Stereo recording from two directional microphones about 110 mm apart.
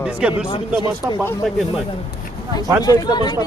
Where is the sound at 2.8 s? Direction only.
40° left (ahead or behind).